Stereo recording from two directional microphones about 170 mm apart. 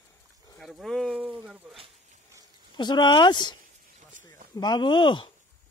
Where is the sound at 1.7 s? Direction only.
35° right (ahead or behind).